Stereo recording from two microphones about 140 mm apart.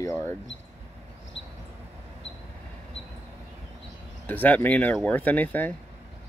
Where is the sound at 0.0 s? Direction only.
15° left (ahead or behind).